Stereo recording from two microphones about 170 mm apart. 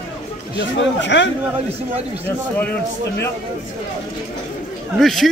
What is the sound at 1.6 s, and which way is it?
Speech, 35° right (ahead or behind).